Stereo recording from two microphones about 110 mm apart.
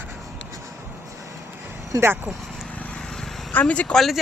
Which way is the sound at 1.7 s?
25° right (ahead or behind).